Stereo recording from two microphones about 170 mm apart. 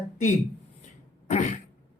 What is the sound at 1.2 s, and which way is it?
Throat clearing, 45° left (ahead or behind).